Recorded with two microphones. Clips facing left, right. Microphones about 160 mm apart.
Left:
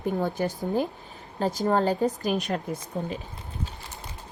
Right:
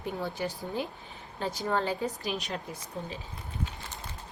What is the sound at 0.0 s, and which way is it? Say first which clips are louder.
A woman's voice: left 7 dB; 45° left (ahead or behind).